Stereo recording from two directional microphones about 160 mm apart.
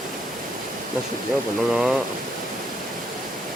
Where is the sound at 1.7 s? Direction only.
5° right (ahead or behind).